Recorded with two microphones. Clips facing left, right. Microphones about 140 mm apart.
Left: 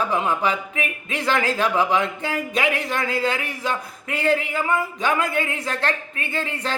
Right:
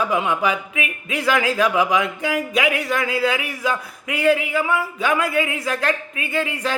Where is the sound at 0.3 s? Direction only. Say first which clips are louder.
Right 1 dB; 35° left (ahead or behind).